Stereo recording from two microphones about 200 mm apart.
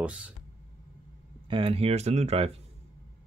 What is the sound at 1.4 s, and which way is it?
Speech, 25° right (ahead or behind).